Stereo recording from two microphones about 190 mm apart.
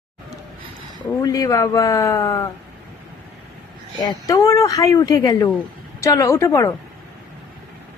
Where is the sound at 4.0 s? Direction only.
20° left (ahead or behind).